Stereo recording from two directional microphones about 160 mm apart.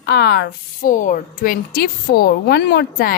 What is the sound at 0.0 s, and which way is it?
Speech, 90° left.